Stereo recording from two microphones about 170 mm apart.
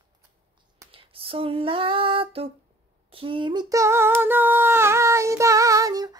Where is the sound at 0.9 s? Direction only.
30° right (ahead or behind).